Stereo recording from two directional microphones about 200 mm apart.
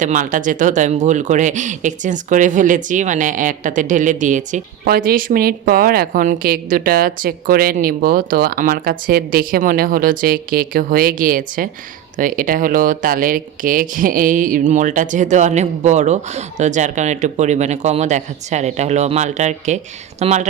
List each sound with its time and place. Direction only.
0.0 s speech: 40° right (ahead or behind)